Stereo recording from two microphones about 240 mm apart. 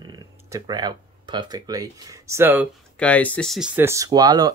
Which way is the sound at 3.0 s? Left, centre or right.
Centre.